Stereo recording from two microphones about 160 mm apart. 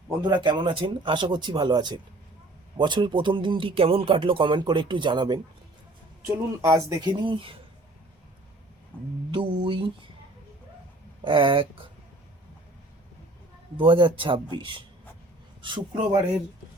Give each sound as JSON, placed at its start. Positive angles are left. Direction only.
{"t": 0.4, "sound": "speech", "side_deg": -30}
{"t": 6.2, "sound": "speech", "side_deg": -15}
{"t": 8.9, "sound": "a sound", "side_deg": 10}
{"t": 9.3, "sound": "speech", "side_deg": -30}
{"t": 11.2, "sound": "speech", "side_deg": -30}
{"t": 13.7, "sound": "speech", "side_deg": -30}